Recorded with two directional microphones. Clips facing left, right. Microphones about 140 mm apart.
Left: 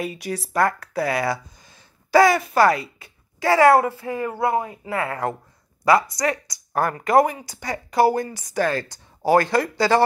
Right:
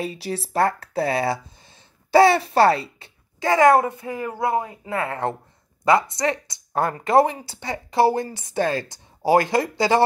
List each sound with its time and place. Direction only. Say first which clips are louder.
0.0 s speech: even; 30° right (ahead or behind)